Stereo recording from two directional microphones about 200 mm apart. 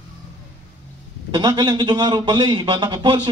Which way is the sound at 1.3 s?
20° right (ahead or behind).